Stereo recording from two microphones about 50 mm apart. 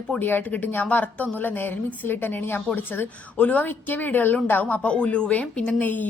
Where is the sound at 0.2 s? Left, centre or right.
Left.